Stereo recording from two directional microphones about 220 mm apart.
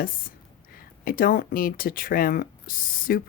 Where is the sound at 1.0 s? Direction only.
40° left (ahead or behind).